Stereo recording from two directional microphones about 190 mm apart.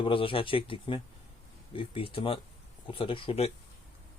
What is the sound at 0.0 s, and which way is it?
Speech, 30° left (ahead or behind).